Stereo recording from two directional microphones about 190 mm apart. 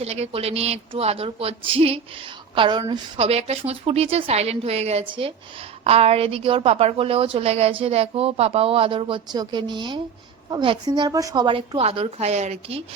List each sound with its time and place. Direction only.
0.0 s a woman's voice: 35° right (ahead or behind)